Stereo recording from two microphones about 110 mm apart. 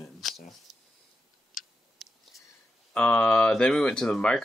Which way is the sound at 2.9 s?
15° left (ahead or behind).